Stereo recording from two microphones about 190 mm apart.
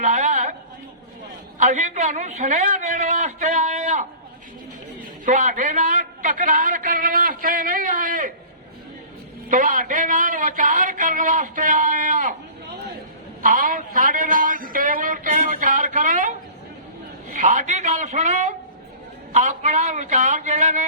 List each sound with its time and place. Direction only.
0.0 s a sound: 40° right (ahead or behind)
1.5 s a man's voice: 40° right (ahead or behind)
5.2 s a man's voice: 40° right (ahead or behind)
9.5 s a man's voice: 45° right (ahead or behind)
13.4 s a sound: 45° right (ahead or behind)
17.3 s a man's voice: 40° right (ahead or behind)